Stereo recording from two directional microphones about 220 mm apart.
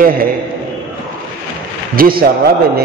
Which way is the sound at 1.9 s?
40° right (ahead or behind).